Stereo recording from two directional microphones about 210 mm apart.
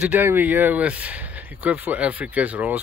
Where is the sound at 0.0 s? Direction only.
10° right (ahead or behind).